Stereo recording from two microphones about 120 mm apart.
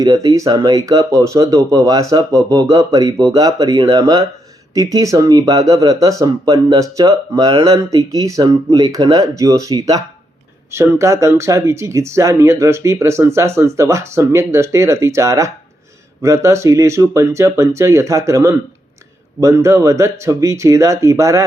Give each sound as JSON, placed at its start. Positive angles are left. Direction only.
{"t": 0.0, "sound": "speech", "side_deg": -30}